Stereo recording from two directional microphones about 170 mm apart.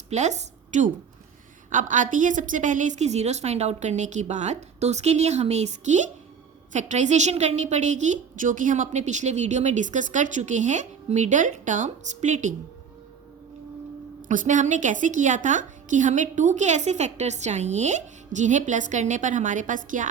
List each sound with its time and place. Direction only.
0.1 s a woman's voice: 45° right (ahead or behind)
14.2 s speech: 50° right (ahead or behind)